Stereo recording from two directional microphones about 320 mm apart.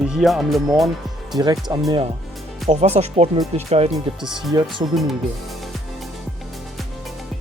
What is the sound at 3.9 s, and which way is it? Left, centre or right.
Speech, centre.